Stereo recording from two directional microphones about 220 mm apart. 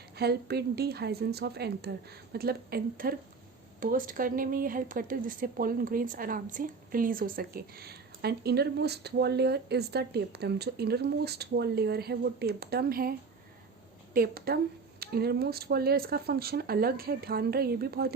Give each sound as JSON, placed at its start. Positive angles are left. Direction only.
{"t": 0.2, "sound": "speech", "side_deg": -45}